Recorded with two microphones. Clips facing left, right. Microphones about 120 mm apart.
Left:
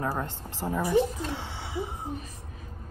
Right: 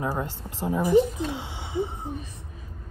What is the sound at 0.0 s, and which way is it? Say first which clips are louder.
Speech: right 2 dB; 10° right (ahead or behind).